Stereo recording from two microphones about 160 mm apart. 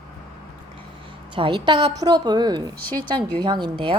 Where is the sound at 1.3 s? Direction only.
30° right (ahead or behind).